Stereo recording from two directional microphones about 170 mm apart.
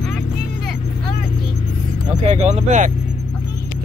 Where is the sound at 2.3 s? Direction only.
40° right (ahead or behind).